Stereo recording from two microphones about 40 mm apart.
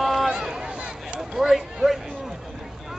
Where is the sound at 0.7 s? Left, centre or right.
Right.